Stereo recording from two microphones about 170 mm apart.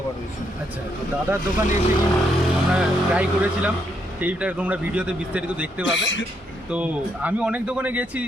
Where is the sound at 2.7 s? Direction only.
5° right (ahead or behind).